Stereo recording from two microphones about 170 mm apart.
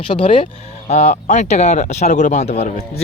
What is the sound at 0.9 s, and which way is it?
Speech, 45° left (ahead or behind).